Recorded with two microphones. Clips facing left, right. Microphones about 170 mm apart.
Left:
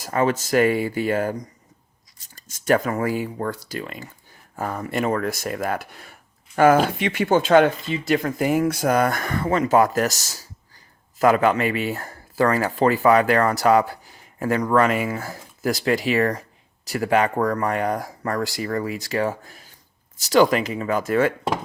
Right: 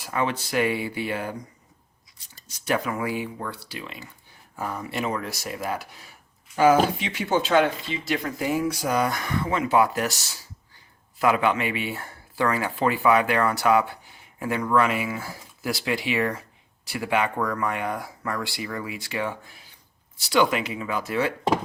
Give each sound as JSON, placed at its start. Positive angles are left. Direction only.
{"t": 0.0, "sound": "speech", "side_deg": 45}